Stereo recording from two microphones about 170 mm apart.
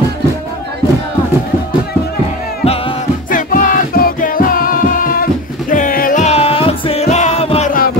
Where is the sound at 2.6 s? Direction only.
35° left (ahead or behind).